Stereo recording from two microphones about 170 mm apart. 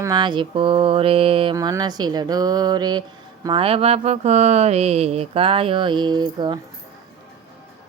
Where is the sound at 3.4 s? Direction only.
30° right (ahead or behind).